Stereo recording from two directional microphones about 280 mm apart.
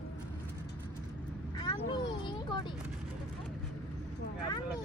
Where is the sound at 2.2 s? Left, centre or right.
Centre.